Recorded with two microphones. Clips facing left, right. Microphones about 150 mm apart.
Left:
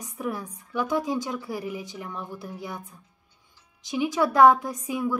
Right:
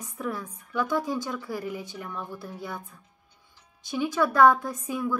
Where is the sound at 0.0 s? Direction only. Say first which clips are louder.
Left 1 dB; 15° left (ahead or behind).